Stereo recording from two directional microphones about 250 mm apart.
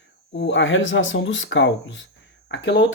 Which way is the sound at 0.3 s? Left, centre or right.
Left.